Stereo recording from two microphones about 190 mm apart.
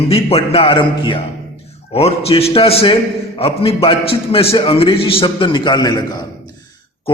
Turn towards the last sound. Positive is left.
turn(degrees=20)  # may be behind; listen again after turning